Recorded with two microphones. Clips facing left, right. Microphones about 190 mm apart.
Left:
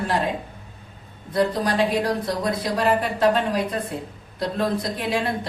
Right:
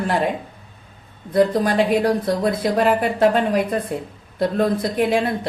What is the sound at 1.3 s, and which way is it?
Speech, 55° right (ahead or behind).